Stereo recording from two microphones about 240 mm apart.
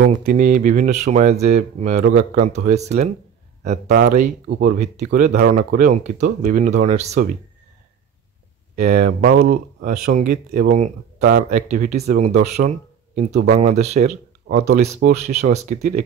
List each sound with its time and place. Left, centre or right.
0.3 s speech: right
8.7 s speech: right
12.6 s a sound: right
13.3 s speech: right
13.6 s speech: right